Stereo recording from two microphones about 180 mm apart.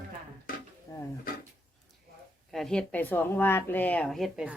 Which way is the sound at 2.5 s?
5° left (ahead or behind).